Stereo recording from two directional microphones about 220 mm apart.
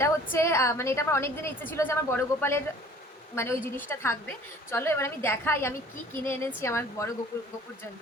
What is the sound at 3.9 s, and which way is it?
A woman's voice, 10° left (ahead or behind).